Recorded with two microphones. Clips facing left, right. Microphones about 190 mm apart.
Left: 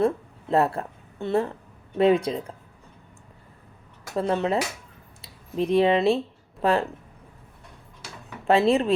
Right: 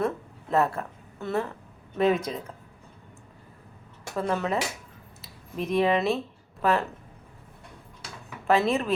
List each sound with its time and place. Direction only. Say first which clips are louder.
0.0 s a woman's voice: left 5 dB; 30° left (ahead or behind)
4.1 s speech: left 3 dB; 30° left (ahead or behind)
8.4 s speech: left 4 dB; 30° left (ahead or behind)